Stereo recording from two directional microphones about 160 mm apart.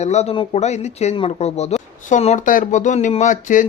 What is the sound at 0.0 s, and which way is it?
Speech, 45° left (ahead or behind).